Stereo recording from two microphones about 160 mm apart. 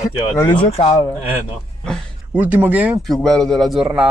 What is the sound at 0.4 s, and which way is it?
Speech, 30° left (ahead or behind).